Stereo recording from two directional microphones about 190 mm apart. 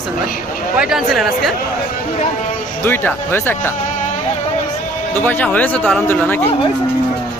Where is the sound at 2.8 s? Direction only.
10° left (ahead or behind).